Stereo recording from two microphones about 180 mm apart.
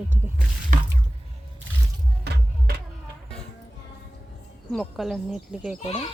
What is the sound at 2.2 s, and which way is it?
Music, 65° right (ahead or behind).